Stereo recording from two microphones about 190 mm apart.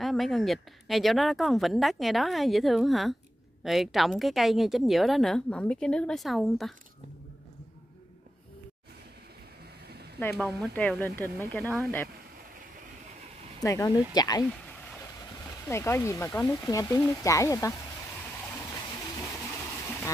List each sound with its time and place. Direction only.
0.0 s a woman's voice: centre (ahead or behind)
10.3 s a woman's voice: centre (ahead or behind)
13.6 s speech: 20° left (ahead or behind)
15.7 s speech: 15° left (ahead or behind)
19.1 s a sound: 15° left (ahead or behind)